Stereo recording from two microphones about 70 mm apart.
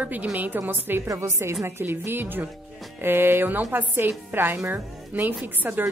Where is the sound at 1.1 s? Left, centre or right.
Right.